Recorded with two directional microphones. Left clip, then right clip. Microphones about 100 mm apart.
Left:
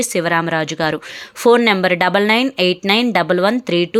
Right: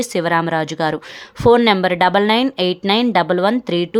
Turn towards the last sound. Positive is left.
turn(degrees=0)  # may be behind; listen again after turning